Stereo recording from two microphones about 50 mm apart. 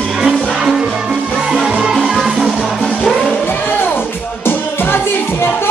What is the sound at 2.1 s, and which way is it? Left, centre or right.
Music, centre.